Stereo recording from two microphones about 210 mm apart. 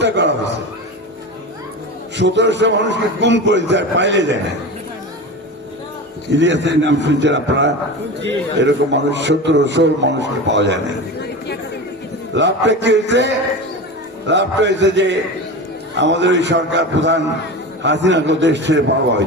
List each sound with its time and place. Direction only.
0.0 s a man's voice: 55° right (ahead or behind)
2.1 s a man's voice: 55° right (ahead or behind)
6.3 s a man's voice: 60° right (ahead or behind)
12.3 s a man's voice: 55° right (ahead or behind)